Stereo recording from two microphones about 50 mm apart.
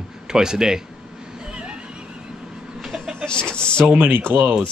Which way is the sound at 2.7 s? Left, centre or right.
Centre.